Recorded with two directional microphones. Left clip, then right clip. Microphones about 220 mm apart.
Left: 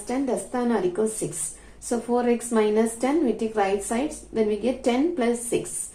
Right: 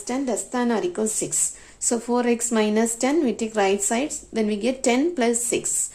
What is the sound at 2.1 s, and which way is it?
A woman's voice, 55° right (ahead or behind).